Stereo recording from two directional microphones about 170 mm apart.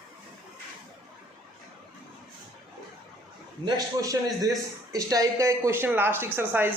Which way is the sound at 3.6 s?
20° right (ahead or behind).